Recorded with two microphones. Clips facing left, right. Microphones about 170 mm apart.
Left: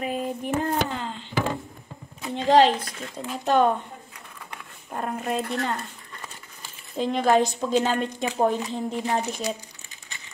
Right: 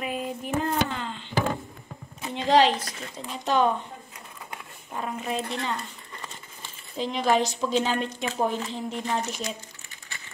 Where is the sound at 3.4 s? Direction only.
50° left (ahead or behind).